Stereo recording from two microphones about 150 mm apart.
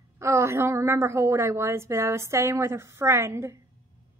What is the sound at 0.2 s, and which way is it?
A woman's voice, 20° right (ahead or behind).